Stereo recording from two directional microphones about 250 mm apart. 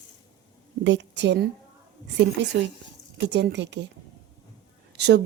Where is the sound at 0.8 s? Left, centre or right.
Right.